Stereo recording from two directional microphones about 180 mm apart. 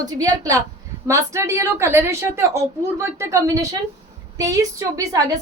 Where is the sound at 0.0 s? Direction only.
20° right (ahead or behind).